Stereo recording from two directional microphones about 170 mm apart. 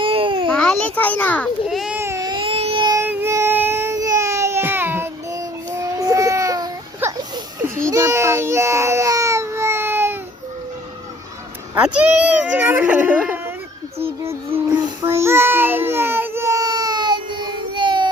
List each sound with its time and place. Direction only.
0.0 s a sound: 30° right (ahead or behind)
0.5 s a child's voice: 5° left (ahead or behind)
1.6 s baby cry: 5° right (ahead or behind)
2.0 s baby cry: 15° right (ahead or behind)
3.0 s baby cry: 10° right (ahead or behind)
11.7 s a child's voice: 5° right (ahead or behind)
15.0 s baby cry: 15° right (ahead or behind)